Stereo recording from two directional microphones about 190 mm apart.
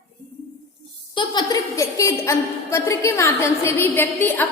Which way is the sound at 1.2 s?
20° left (ahead or behind).